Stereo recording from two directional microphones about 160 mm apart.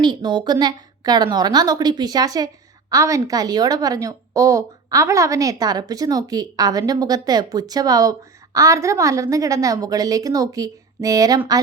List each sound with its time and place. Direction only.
0.0 s a woman's voice: 30° right (ahead or behind)